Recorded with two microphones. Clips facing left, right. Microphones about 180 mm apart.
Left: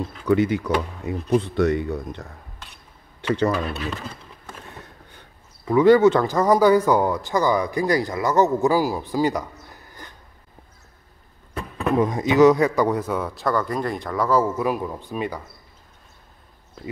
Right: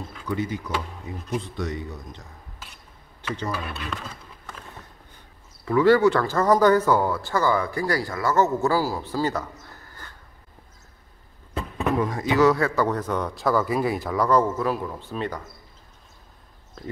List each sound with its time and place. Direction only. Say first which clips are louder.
0.3 s speech: left 8 dB; 70° left (ahead or behind)
3.2 s speech: left 9 dB; 70° left (ahead or behind)
5.7 s speech: left 3 dB; 20° left (ahead or behind)
11.5 s speech: left 3 dB; 20° left (ahead or behind)